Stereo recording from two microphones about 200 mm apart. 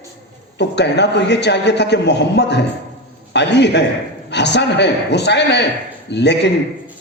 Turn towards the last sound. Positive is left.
turn(degrees=60)  # may be behind; listen again after turning